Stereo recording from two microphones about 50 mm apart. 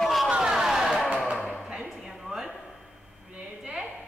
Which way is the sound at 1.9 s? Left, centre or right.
Centre.